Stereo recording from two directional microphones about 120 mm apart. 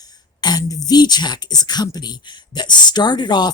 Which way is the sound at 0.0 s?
35° left (ahead or behind).